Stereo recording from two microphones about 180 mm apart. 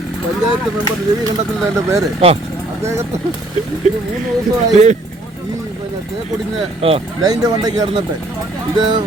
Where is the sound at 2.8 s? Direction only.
15° right (ahead or behind).